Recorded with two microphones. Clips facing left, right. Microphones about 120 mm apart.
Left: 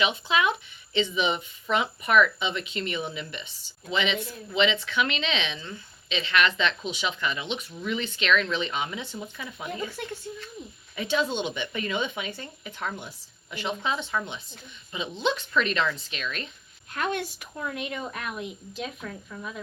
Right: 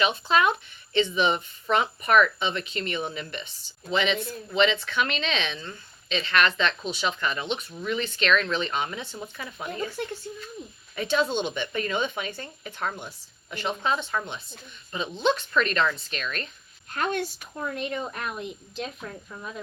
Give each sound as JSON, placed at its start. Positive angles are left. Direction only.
{"t": 0.0, "sound": "a woman's voice", "side_deg": -45}
{"t": 10.9, "sound": "speech", "side_deg": -45}
{"t": 15.2, "sound": "speech", "side_deg": -45}
{"t": 17.1, "sound": "a woman's voice", "side_deg": 5}
{"t": 17.6, "sound": "a woman's voice", "side_deg": -35}
{"t": 19.0, "sound": "speech", "side_deg": -25}